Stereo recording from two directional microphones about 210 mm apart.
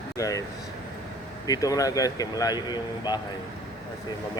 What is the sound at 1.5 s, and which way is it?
Speech, 15° left (ahead or behind).